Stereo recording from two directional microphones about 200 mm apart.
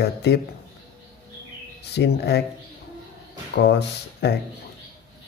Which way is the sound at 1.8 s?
55° left (ahead or behind).